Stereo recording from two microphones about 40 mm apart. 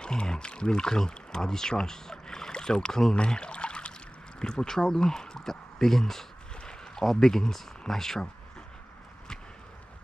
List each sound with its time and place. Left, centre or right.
0.0 s speech: left
3.3 s trickle: left
4.4 s speech: centre